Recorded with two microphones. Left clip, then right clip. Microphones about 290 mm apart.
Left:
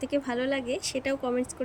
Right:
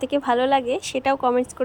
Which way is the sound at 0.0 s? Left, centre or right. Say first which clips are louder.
Right 9 dB; centre.